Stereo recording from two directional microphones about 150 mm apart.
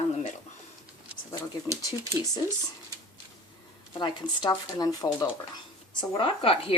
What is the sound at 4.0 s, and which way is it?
Speech, 30° left (ahead or behind).